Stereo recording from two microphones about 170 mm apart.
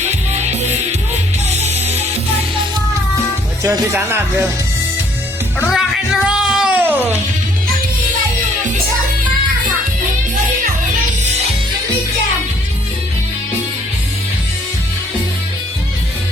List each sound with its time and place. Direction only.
0.0 s music: 40° right (ahead or behind)
3.6 s speech: 20° right (ahead or behind)
5.5 s music: centre (ahead or behind)